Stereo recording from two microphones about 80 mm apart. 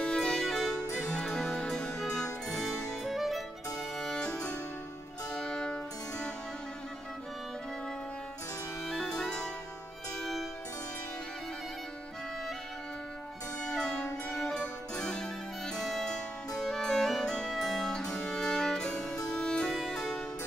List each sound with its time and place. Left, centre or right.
0.0 s music: centre
2.7 s music: left
3.0 s music: centre
4.0 s music: centre
8.8 s music: centre
13.7 s music: centre